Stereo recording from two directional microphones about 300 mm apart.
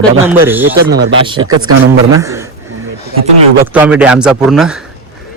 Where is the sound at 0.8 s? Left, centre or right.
Right.